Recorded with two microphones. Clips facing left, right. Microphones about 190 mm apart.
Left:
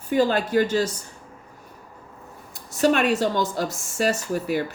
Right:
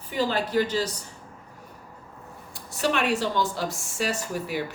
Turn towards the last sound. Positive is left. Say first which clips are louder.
# left 5 dB
turn(degrees=45)  # may be behind; listen again after turning